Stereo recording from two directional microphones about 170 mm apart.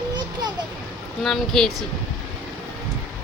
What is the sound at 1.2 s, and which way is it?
Speech, centre (ahead or behind).